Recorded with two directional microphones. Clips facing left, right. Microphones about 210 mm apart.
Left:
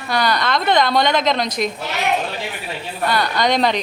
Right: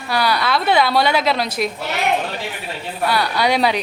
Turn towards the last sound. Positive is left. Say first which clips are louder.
# even
turn(degrees=-10)  # may be behind; listen again after turning